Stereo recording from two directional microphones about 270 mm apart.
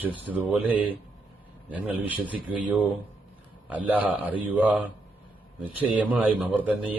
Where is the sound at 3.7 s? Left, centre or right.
Centre.